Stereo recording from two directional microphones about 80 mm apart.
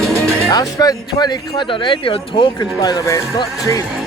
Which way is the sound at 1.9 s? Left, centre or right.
Left.